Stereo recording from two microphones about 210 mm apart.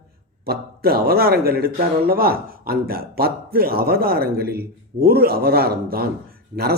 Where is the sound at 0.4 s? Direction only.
45° right (ahead or behind).